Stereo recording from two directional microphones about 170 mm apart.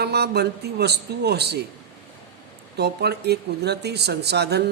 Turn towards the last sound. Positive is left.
turn(degrees=-75)  # may be behind; listen again after turning